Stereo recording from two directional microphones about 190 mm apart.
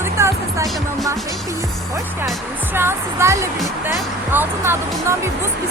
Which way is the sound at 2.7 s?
15° right (ahead or behind).